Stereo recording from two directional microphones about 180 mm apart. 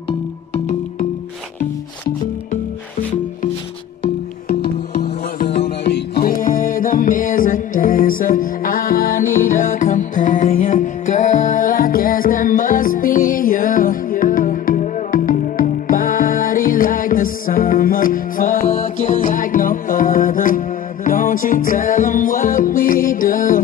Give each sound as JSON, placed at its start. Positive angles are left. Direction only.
{"t": 4.6, "sound": "music", "side_deg": 60}